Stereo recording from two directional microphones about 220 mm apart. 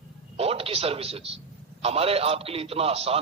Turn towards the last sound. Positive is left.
turn(degrees=-25)  # may be behind; listen again after turning